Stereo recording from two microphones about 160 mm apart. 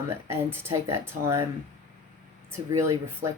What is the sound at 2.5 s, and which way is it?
Speech, 20° right (ahead or behind).